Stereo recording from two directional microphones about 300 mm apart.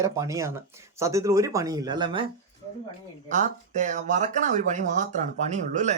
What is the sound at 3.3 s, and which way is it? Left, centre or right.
Speech, right.